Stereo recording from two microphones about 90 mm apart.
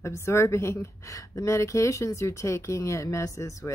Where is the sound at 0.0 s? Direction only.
30° left (ahead or behind).